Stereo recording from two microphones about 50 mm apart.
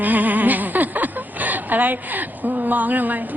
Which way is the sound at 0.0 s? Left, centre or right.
Right.